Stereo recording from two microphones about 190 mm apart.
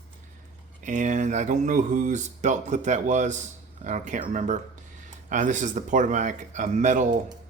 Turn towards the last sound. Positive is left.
turn(degrees=-40)  # may be behind; listen again after turning